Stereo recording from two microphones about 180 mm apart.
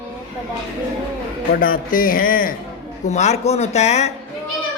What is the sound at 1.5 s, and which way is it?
Speech, 50° left (ahead or behind).